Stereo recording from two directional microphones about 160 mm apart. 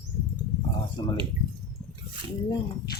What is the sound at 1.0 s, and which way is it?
Speech, 25° left (ahead or behind).